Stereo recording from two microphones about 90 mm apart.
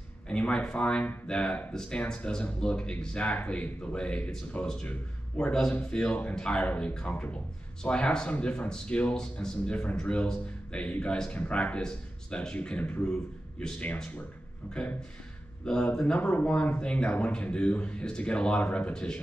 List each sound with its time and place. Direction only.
0.3 s a man's voice: 10° left (ahead or behind)